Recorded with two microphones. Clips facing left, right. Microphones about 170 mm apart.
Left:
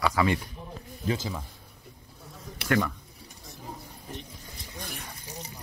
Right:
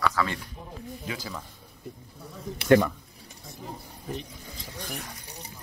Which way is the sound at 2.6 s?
25° right (ahead or behind).